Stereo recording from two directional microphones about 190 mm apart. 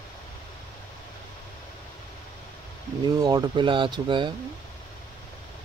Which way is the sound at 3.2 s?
20° right (ahead or behind).